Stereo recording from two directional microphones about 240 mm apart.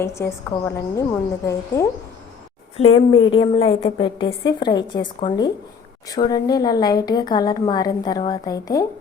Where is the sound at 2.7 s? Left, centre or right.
Left.